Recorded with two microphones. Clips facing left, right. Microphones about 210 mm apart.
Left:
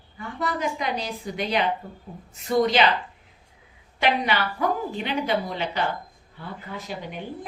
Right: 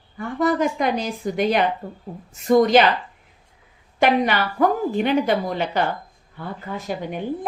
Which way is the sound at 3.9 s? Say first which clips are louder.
Right 5 dB; 50° right (ahead or behind).